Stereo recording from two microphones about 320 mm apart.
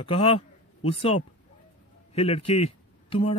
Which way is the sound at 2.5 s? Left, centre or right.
Centre.